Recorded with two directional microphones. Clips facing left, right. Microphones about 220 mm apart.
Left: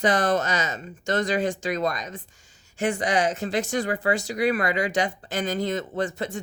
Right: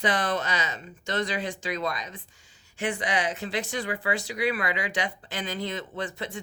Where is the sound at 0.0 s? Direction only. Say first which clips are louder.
Left 5 dB; 45° left (ahead or behind).